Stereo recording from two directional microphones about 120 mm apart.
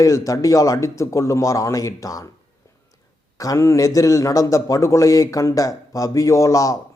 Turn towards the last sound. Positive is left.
turn(degrees=30)  # may be behind; listen again after turning